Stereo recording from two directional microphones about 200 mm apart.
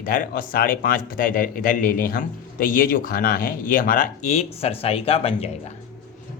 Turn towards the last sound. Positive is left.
turn(degrees=30)  # may be behind; listen again after turning